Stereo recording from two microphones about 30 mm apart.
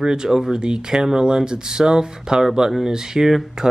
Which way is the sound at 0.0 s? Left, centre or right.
Right.